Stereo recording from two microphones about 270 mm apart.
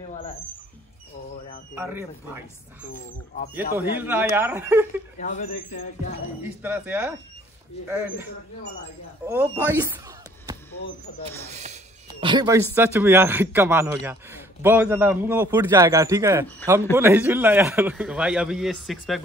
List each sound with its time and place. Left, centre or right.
1.8 s a man's voice: centre
3.7 s a man's voice: centre
5.2 s speech: left
6.4 s a man's voice: centre
9.2 s speech: centre
11.5 s a man's voice: right; by 19.2 s centre